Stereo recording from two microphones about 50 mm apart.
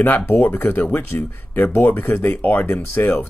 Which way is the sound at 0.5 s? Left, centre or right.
Left.